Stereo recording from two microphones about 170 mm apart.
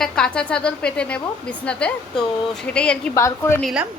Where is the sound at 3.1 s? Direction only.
20° left (ahead or behind).